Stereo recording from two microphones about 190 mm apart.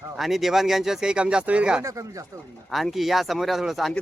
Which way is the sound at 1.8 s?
15° right (ahead or behind).